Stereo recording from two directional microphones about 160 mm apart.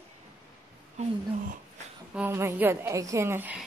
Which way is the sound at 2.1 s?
10° right (ahead or behind).